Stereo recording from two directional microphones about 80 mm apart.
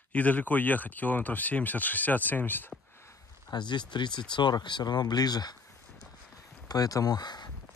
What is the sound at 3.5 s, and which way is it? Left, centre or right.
Speech, left.